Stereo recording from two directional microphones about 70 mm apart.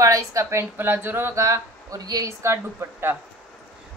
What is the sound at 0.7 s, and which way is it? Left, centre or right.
Speech, right.